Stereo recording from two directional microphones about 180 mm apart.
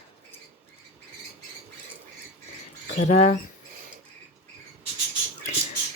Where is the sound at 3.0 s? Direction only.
40° left (ahead or behind).